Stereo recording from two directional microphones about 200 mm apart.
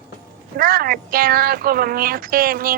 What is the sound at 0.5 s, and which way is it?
Speech, 45° right (ahead or behind).